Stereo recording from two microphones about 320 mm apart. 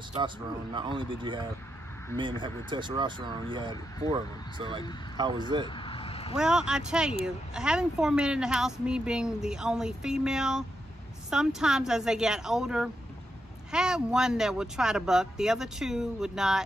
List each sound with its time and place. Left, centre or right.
0.7 s speech: centre
5.7 s vehicle: centre
6.3 s speech: centre